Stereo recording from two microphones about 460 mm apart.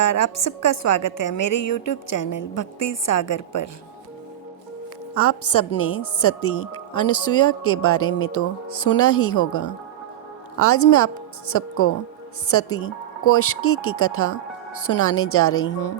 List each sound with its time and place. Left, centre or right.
0.0 s a woman's voice: left
5.1 s a woman's voice: left